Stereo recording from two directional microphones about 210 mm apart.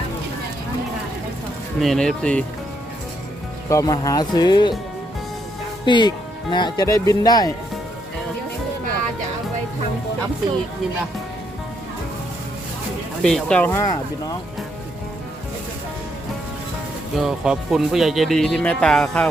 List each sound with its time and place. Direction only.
1.8 s speech: centre (ahead or behind)
3.7 s speech: 15° left (ahead or behind)
5.8 s speech: 20° left (ahead or behind)
13.2 s speech: 5° left (ahead or behind)
17.2 s speech: centre (ahead or behind)